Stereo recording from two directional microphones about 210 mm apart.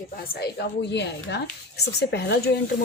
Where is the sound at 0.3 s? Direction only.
50° left (ahead or behind).